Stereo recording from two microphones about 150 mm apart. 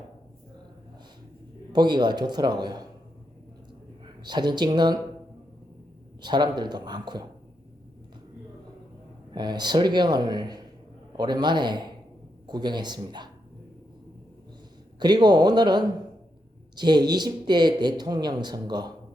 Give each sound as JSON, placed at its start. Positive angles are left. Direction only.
{"t": 1.7, "sound": "speech", "side_deg": -30}
{"t": 4.0, "sound": "speech", "side_deg": -30}
{"t": 6.2, "sound": "speech", "side_deg": -30}
{"t": 9.3, "sound": "speech", "side_deg": -30}
{"t": 14.9, "sound": "speech", "side_deg": -30}